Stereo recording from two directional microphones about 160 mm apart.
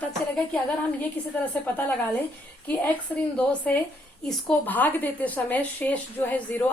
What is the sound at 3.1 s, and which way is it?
A woman's voice, 10° left (ahead or behind).